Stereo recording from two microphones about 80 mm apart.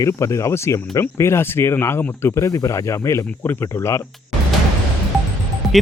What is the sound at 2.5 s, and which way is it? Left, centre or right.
Speech, left.